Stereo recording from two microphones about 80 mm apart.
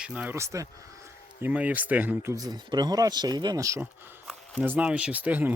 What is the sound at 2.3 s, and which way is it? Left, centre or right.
Speech, right.